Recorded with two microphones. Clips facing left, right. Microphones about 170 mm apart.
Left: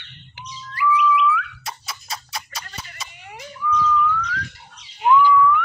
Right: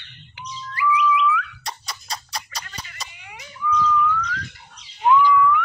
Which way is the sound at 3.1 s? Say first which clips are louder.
Left 4 dB; 45° left (ahead or behind).